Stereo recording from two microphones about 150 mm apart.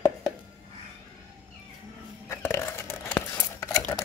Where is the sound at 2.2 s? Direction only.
15° left (ahead or behind).